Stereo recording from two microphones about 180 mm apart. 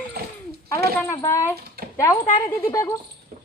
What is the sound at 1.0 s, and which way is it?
A woman's voice, 15° left (ahead or behind).